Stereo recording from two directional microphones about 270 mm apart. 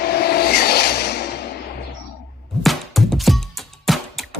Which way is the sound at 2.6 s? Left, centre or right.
Centre.